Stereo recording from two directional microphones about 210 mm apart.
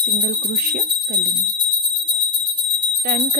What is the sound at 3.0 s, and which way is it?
Speech, 45° right (ahead or behind).